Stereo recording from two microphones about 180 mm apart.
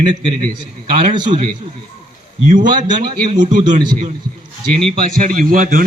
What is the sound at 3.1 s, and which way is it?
Speech, 25° right (ahead or behind).